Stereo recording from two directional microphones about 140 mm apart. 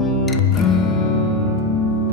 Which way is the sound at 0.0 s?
Centre (ahead or behind).